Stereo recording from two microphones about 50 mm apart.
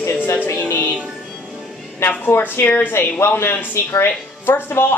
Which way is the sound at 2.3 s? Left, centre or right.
Left.